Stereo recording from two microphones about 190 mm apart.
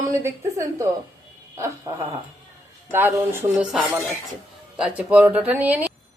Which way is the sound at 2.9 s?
10° right (ahead or behind).